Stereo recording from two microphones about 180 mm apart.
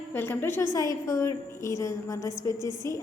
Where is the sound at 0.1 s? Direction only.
10° left (ahead or behind).